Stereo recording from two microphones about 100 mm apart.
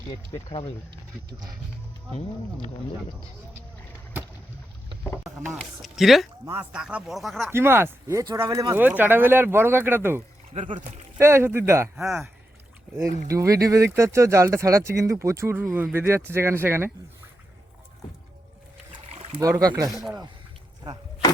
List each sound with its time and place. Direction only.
0.3 s speech: 45° left (ahead or behind)
5.5 s speech: centre (ahead or behind)
6.5 s speech: 15° right (ahead or behind); by 7.5 s centre (ahead or behind)
7.5 s speech: 25° right (ahead or behind)
8.8 s speech: 20° right (ahead or behind)
10.5 s speech: 90° right
11.2 s speech: 25° right (ahead or behind)
11.9 s speech: centre (ahead or behind)
13.2 s speech: 30° right (ahead or behind)
19.4 s speech: 40° right (ahead or behind)
19.9 s speech: centre (ahead or behind)